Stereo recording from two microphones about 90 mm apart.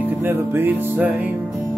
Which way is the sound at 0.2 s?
25° right (ahead or behind).